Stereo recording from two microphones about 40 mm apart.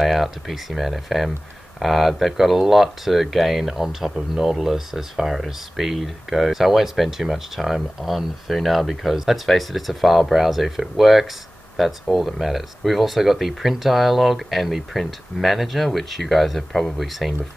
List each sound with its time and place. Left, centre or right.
0.0 s speech: centre